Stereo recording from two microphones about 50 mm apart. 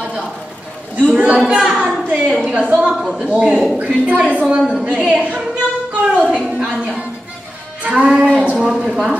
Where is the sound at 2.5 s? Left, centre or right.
Centre.